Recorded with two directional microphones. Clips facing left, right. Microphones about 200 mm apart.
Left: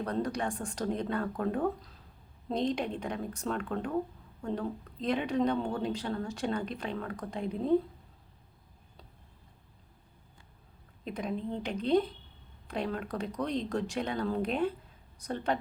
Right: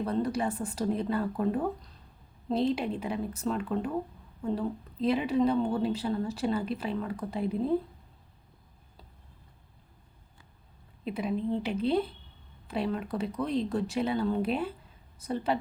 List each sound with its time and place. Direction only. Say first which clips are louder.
0.0 s speech: right 3 dB; 5° right (ahead or behind)
11.0 s speech: right 4 dB; 5° right (ahead or behind)